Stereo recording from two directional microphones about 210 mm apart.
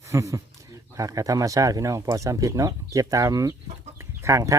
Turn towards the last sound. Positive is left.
turn(degrees=-15)  # may be behind; listen again after turning